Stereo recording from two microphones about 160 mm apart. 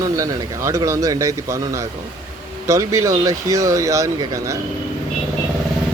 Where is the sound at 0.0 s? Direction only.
20° right (ahead or behind).